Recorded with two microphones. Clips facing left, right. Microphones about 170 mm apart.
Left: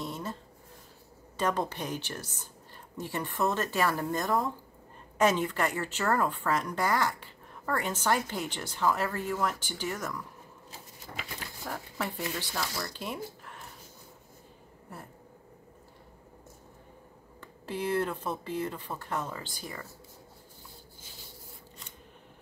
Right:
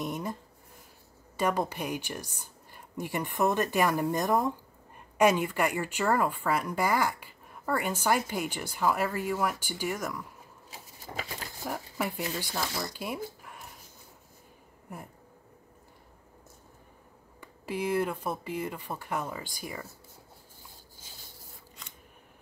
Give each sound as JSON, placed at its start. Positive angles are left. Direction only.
{"t": 0.0, "sound": "a sound", "side_deg": -15}
{"t": 1.3, "sound": "speech", "side_deg": -10}
{"t": 11.6, "sound": "speech", "side_deg": -10}
{"t": 17.4, "sound": "speech", "side_deg": -10}